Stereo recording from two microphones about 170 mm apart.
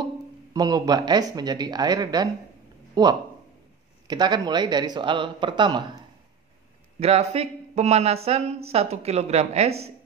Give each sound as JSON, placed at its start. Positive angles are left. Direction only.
{"t": 0.5, "sound": "speech", "side_deg": -25}
{"t": 2.9, "sound": "a sound", "side_deg": -25}
{"t": 4.1, "sound": "speech", "side_deg": -25}
{"t": 7.0, "sound": "speech", "side_deg": -40}